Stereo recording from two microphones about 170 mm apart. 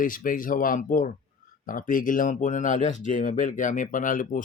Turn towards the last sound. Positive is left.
turn(degrees=50)  # may be behind; listen again after turning